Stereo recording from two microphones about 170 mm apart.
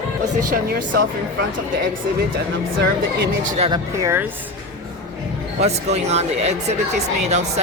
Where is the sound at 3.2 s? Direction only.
50° right (ahead or behind).